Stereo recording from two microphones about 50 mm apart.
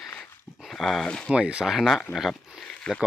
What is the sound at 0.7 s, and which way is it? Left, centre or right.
Speech, centre.